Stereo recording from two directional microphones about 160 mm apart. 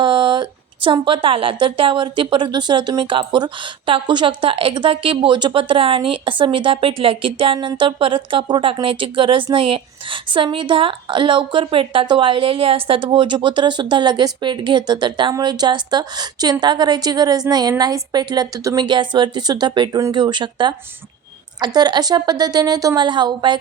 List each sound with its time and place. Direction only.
0.0 s a woman's voice: 30° right (ahead or behind)